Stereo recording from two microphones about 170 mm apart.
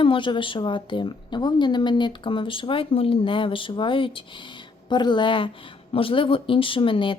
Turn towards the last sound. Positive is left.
turn(degrees=30)  # may be behind; listen again after turning